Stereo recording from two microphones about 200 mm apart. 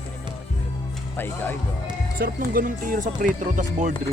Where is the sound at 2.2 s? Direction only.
45° right (ahead or behind).